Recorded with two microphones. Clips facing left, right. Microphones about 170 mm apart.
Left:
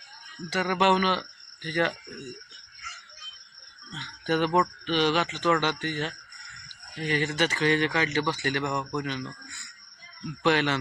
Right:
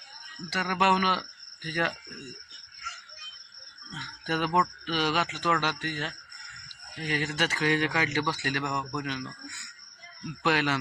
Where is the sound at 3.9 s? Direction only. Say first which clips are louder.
Left 5 dB; 5° right (ahead or behind).